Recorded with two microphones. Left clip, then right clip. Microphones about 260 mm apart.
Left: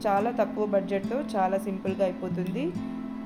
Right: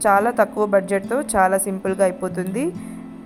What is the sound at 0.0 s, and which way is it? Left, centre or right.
A woman's voice, right.